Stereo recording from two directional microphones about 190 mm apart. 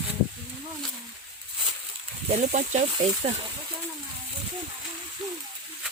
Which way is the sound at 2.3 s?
40° right (ahead or behind).